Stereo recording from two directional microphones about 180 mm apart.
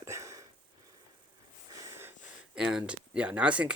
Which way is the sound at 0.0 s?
15° right (ahead or behind).